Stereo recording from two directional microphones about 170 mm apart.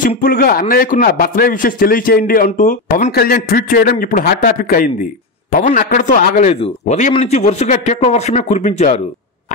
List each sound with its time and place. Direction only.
0.0 s a man's voice: 55° left (ahead or behind)
6.5 s speech: 40° left (ahead or behind)